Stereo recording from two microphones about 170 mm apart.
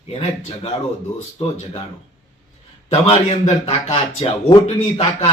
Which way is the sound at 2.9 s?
35° left (ahead or behind).